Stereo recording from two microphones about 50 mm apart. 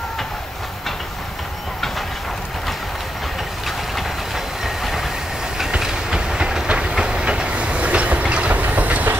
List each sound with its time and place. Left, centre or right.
4.6 s train: centre; by 9.1 s right